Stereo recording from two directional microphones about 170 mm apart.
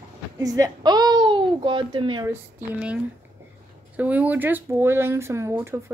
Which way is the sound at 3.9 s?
10° right (ahead or behind).